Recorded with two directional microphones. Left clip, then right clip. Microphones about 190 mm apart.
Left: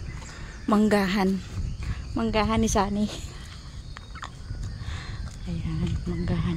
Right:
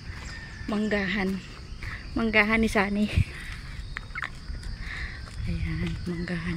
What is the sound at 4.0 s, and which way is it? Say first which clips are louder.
Fowl: right 6 dB; centre (ahead or behind).